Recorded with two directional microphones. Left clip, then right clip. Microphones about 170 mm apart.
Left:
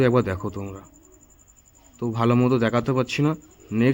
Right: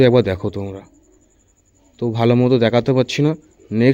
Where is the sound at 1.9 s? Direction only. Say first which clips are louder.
Right 6 dB; 25° right (ahead or behind).